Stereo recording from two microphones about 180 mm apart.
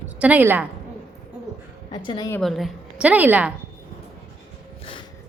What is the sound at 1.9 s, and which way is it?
Speech, 25° left (ahead or behind).